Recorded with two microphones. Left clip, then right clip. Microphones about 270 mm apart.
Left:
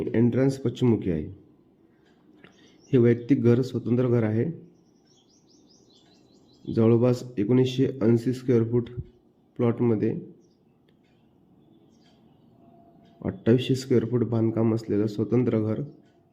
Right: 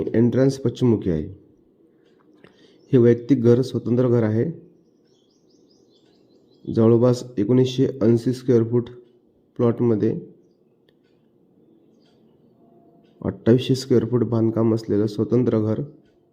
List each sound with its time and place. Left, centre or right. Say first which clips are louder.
0.0 s a man's voice: right 5 dB; centre
2.4 s a man's voice: right 2 dB; centre
6.7 s a man's voice: right 5 dB; centre
13.2 s a man's voice: right 4 dB; centre